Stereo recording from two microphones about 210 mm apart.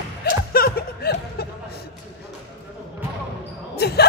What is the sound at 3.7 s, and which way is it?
Basketball bounce, 50° left (ahead or behind).